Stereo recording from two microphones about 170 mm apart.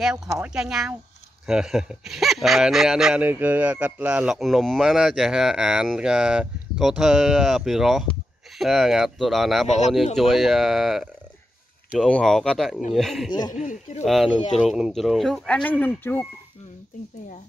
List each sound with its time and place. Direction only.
0.0 s speech: 5° right (ahead or behind)
13.5 s speech: 45° left (ahead or behind)
14.0 s speech: centre (ahead or behind)